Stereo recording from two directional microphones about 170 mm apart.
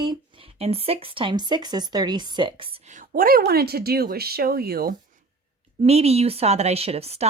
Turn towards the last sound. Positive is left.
turn(degrees=-35)  # may be behind; listen again after turning